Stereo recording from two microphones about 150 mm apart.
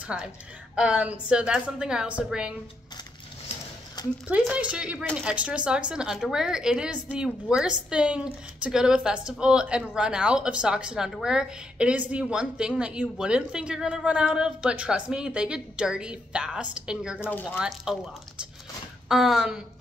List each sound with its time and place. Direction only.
0.1 s a woman's voice: 10° right (ahead or behind)
4.0 s a sound: 25° left (ahead or behind)
4.3 s a woman's voice: 10° right (ahead or behind)
17.2 s speech: 10° left (ahead or behind)
17.5 s a woman's voice: 5° right (ahead or behind)
19.0 s a woman's voice: 5° right (ahead or behind)